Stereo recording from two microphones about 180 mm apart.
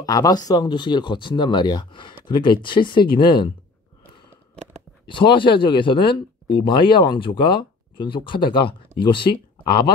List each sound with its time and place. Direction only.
0.0 s speech: 20° left (ahead or behind)
5.0 s speech: 25° left (ahead or behind)